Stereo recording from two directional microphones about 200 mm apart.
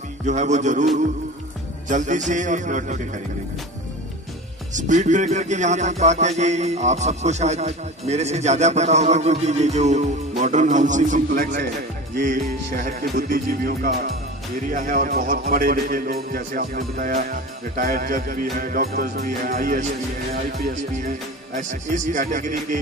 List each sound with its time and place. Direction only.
0.2 s a man's voice: 35° right (ahead or behind)
4.7 s a man's voice: 40° right (ahead or behind)
12.2 s music: 40° right (ahead or behind)
20.9 s a man's voice: 40° right (ahead or behind)